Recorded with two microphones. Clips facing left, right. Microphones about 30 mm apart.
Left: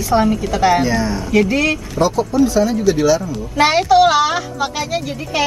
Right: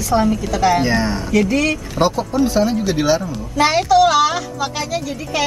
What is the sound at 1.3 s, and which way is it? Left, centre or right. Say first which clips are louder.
Speech: left 2 dB; centre.